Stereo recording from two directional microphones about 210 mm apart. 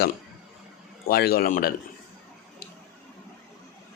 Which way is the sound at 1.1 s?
45° left (ahead or behind).